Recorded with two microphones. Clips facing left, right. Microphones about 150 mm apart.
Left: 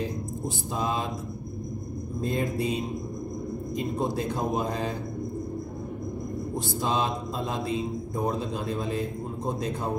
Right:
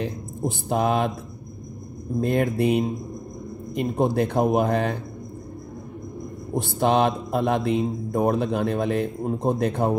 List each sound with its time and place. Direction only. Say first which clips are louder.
0.7 s a man's voice: right 8 dB; 65° right (ahead or behind)
2.2 s a man's voice: right 6 dB; 65° right (ahead or behind)
6.8 s a man's voice: right 8 dB; 65° right (ahead or behind)